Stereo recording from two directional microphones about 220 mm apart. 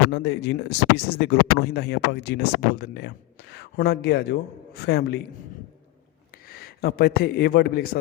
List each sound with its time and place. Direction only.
0.1 s speech: 50° left (ahead or behind)
6.5 s a man's voice: 45° left (ahead or behind)